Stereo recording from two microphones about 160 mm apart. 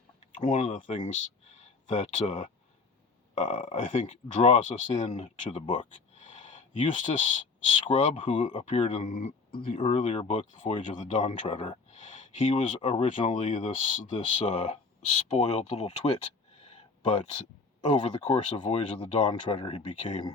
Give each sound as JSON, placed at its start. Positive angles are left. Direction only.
{"t": 0.4, "sound": "speech", "side_deg": 55}
{"t": 6.1, "sound": "a sound", "side_deg": 50}
{"t": 7.9, "sound": "speech", "side_deg": 35}
{"t": 9.0, "sound": "speech", "side_deg": 55}
{"t": 9.7, "sound": "speech", "side_deg": 40}
{"t": 11.4, "sound": "speech", "side_deg": 30}
{"t": 11.9, "sound": "speech", "side_deg": 50}
{"t": 16.6, "sound": "a sound", "side_deg": 35}
{"t": 18.2, "sound": "speech", "side_deg": 45}